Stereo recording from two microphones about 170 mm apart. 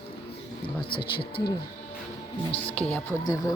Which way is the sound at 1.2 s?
30° left (ahead or behind).